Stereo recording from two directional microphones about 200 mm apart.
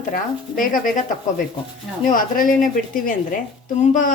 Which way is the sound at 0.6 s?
40° left (ahead or behind).